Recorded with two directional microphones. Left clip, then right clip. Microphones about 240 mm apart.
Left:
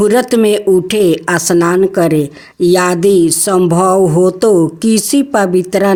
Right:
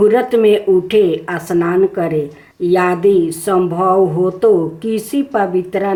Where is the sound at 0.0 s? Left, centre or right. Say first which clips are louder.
Left 1 dB; left.